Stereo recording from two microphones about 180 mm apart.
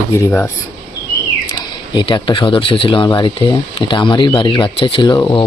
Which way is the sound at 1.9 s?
25° left (ahead or behind).